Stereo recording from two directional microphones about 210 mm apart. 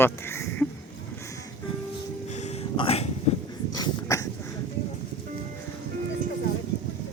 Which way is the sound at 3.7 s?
15° left (ahead or behind).